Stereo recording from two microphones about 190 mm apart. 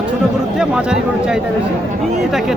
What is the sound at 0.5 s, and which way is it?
Speech, 5° right (ahead or behind).